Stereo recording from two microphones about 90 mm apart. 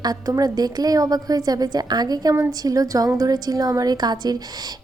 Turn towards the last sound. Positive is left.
turn(degrees=-50)  # may be behind; listen again after turning